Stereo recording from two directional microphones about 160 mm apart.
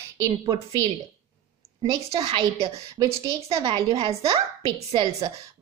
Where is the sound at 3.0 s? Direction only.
20° right (ahead or behind).